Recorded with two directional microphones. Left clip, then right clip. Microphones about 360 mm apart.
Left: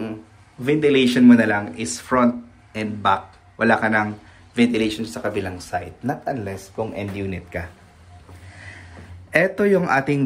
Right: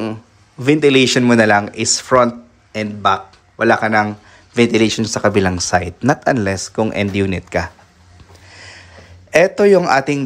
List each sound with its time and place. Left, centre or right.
0.7 s a man's voice: centre
6.0 s speech: right
6.8 s a man's voice: right
9.3 s a man's voice: centre